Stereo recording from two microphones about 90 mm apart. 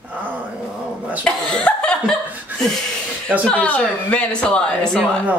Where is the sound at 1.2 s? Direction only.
15° left (ahead or behind).